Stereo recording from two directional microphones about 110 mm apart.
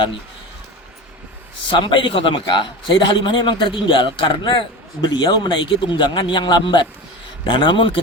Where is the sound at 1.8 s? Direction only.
50° left (ahead or behind).